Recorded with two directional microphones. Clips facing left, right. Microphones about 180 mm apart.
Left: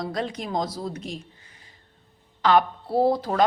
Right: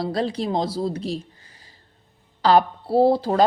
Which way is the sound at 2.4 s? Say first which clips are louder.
Right 3 dB; 35° right (ahead or behind).